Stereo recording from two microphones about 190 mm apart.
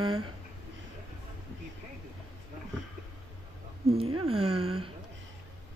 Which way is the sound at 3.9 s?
30° right (ahead or behind).